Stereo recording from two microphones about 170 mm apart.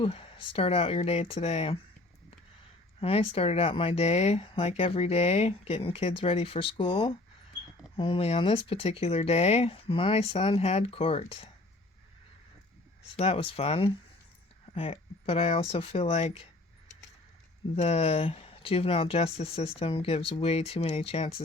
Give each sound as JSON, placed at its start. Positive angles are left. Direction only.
{"t": 0.0, "sound": "speech", "side_deg": 30}
{"t": 3.0, "sound": "speech", "side_deg": 35}
{"t": 13.1, "sound": "speech", "side_deg": 35}
{"t": 17.7, "sound": "speech", "side_deg": 35}